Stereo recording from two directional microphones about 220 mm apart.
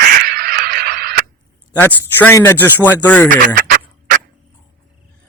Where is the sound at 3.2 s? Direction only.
35° right (ahead or behind).